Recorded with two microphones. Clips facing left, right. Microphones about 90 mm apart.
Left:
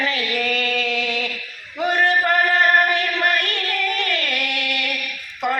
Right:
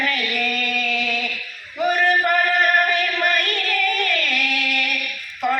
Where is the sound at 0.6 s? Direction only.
20° left (ahead or behind).